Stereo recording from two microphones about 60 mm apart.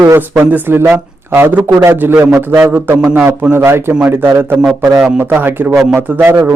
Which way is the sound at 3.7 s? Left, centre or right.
Right.